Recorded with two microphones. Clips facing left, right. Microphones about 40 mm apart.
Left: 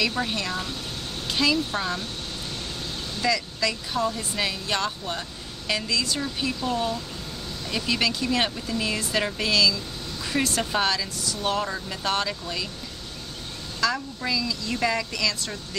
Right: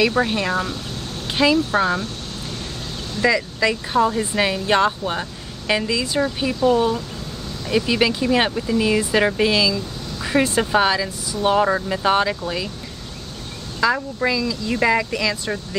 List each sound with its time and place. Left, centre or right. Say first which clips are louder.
0.1 s speech: right 8 dB; right
1.2 s a sound: right 6 dB; right
1.7 s speech: right 9 dB; right
3.2 s speech: right 7 dB; right
13.7 s speech: right 7 dB; right